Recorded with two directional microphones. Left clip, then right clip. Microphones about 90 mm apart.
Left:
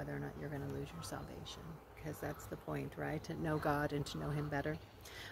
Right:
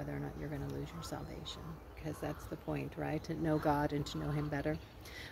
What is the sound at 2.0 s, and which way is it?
Speech, 40° left (ahead or behind).